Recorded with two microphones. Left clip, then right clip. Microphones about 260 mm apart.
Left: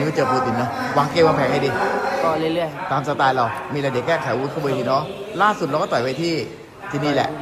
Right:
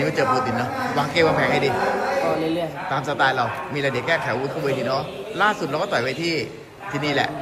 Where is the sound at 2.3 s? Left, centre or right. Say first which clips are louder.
Left 2 dB; centre.